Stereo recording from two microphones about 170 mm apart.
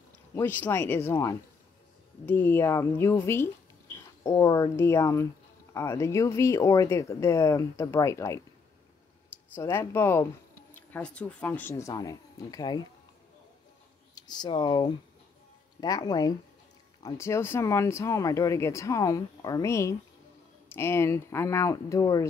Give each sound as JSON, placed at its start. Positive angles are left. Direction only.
{"t": 0.3, "sound": "speech", "side_deg": 10}
{"t": 9.6, "sound": "speech", "side_deg": 15}
{"t": 14.1, "sound": "speech", "side_deg": 25}